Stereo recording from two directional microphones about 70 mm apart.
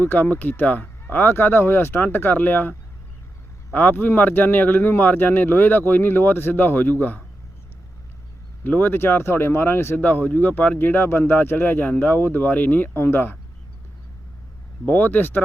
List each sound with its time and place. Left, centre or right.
0.0 s speech: left
8.6 s speech: left
14.8 s speech: left